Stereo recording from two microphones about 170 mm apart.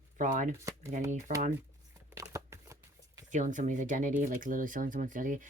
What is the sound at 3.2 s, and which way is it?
Speech, 45° right (ahead or behind).